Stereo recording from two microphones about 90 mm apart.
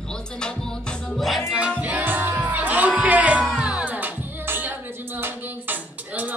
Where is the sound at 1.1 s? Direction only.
Centre (ahead or behind).